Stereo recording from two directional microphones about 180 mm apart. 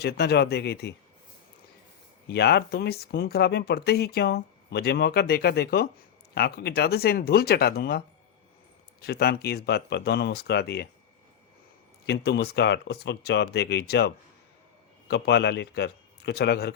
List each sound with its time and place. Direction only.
0.0 s speech: 65° left (ahead or behind)
2.2 s speech: 65° left (ahead or behind)
12.0 s a man's voice: 65° left (ahead or behind)